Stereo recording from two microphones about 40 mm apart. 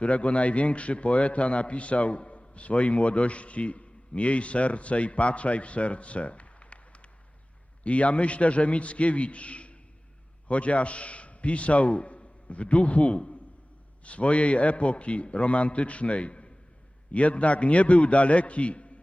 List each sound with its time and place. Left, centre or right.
0.0 s a man's voice: left